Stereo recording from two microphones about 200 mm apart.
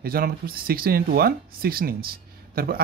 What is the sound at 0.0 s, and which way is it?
Speech, 50° right (ahead or behind).